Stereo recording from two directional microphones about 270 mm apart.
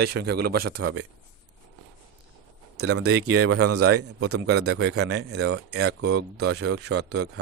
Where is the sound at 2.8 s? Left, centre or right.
Right.